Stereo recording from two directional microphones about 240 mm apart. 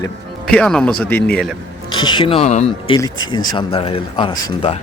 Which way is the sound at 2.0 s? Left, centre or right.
Centre.